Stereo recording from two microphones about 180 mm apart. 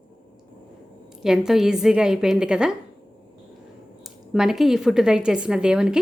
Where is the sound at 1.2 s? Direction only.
5° right (ahead or behind).